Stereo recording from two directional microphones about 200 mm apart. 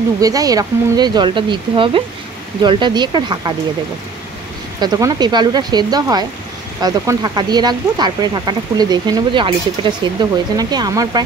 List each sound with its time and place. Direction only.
0.2 s speech: 15° right (ahead or behind)
4.7 s speech: 20° right (ahead or behind)